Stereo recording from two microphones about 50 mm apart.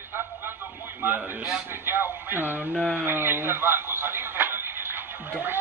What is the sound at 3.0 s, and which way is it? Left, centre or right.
Music, right.